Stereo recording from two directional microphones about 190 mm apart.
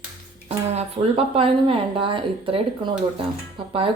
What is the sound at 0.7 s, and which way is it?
A woman's voice, 30° right (ahead or behind).